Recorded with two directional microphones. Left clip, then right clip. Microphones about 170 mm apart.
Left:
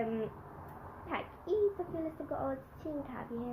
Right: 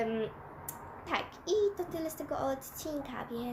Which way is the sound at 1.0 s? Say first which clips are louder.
Right 4 dB; 15° right (ahead or behind).